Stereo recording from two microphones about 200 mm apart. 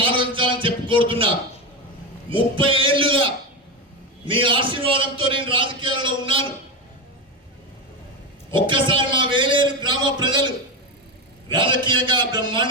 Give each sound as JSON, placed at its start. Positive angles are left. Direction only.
{"t": 0.0, "sound": "a sound", "side_deg": -25}
{"t": 2.3, "sound": "a man's voice", "side_deg": -25}
{"t": 8.5, "sound": "a man's voice", "side_deg": -25}